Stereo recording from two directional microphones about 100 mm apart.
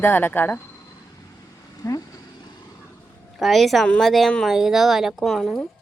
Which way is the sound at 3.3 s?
Centre (ahead or behind).